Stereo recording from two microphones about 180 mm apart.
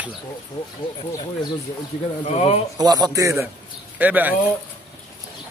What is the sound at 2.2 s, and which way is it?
Speech, 35° left (ahead or behind).